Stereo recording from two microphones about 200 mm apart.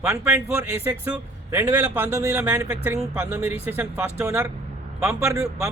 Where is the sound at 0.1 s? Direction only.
15° right (ahead or behind).